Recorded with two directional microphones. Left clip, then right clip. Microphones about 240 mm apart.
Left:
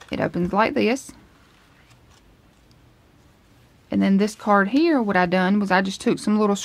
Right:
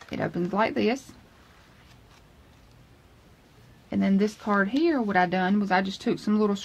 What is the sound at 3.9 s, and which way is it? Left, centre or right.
Speech, left.